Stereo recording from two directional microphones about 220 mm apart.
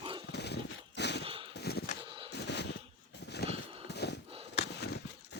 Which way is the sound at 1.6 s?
45° left (ahead or behind).